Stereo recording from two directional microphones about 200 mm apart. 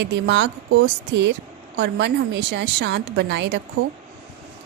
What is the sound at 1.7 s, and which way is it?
Speech, 60° right (ahead or behind).